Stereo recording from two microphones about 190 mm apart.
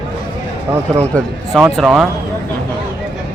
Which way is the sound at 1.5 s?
Centre (ahead or behind).